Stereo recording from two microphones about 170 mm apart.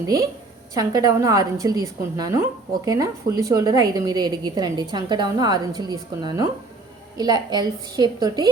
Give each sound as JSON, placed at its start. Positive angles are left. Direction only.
{"t": 0.0, "sound": "a woman's voice", "side_deg": -20}